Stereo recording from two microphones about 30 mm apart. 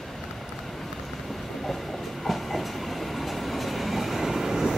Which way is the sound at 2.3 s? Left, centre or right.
Centre.